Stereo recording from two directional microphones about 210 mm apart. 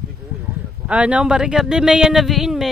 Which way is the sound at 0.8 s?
5° right (ahead or behind).